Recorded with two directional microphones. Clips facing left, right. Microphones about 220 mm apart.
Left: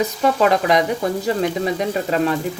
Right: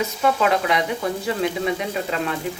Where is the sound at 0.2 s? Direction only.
40° left (ahead or behind).